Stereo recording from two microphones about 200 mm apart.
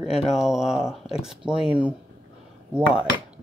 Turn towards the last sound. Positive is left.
turn(degrees=-5)  # may be behind; listen again after turning